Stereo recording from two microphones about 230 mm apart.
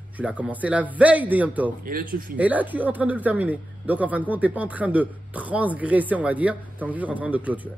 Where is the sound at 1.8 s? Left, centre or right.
Right.